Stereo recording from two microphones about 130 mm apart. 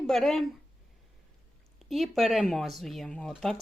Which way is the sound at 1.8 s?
Centre (ahead or behind).